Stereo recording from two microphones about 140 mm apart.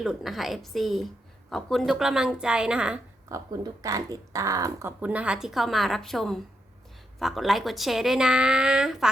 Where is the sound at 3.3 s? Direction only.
25° right (ahead or behind).